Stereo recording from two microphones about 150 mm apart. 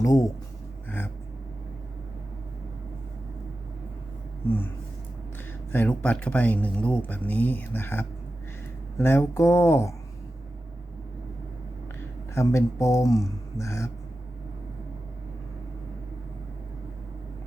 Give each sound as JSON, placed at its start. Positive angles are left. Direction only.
{"t": 0.0, "sound": "speech", "side_deg": 25}
{"t": 0.9, "sound": "a sound", "side_deg": 15}
{"t": 5.7, "sound": "speech", "side_deg": 15}
{"t": 12.3, "sound": "speech", "side_deg": 20}